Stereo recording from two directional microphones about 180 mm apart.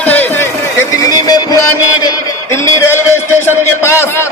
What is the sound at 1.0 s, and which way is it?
Music, 20° left (ahead or behind).